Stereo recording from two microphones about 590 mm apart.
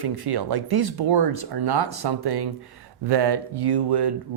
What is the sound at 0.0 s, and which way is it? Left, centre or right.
Speech, right.